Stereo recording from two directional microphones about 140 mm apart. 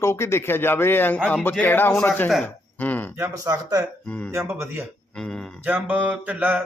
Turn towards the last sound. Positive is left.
turn(degrees=-15)  # may be behind; listen again after turning